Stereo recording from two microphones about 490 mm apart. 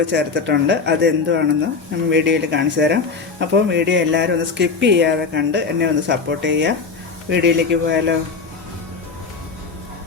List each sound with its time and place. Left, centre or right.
0.1 s speech: right